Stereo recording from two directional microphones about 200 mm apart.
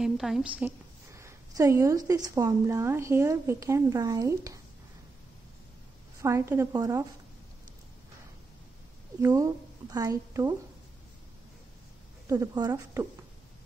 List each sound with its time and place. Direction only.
0.0 s a woman's voice: centre (ahead or behind)
6.2 s a woman's voice: 15° right (ahead or behind)
9.2 s a woman's voice: 15° right (ahead or behind)
12.3 s a woman's voice: 15° right (ahead or behind)